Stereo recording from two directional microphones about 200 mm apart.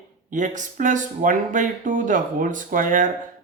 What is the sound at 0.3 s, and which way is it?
Speech, 40° right (ahead or behind).